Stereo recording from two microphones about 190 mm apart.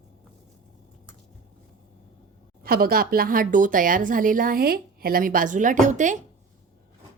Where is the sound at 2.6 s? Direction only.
50° right (ahead or behind).